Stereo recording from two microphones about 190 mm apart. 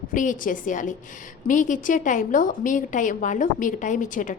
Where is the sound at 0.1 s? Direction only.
45° left (ahead or behind).